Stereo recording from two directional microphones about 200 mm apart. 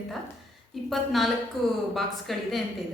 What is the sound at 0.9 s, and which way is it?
A woman's voice, centre (ahead or behind).